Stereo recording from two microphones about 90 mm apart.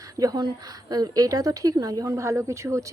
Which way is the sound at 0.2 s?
45° right (ahead or behind).